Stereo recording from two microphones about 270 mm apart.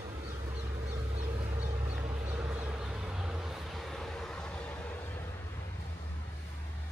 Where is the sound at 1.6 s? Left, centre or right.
Right.